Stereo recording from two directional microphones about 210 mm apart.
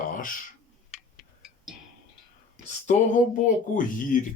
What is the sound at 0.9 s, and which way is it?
Music, centre (ahead or behind).